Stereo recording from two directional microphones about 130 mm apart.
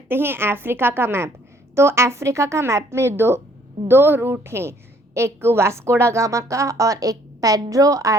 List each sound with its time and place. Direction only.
0.1 s a woman's voice: 15° right (ahead or behind)